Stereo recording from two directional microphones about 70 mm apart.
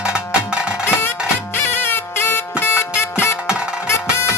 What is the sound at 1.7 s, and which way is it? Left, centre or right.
Music, left.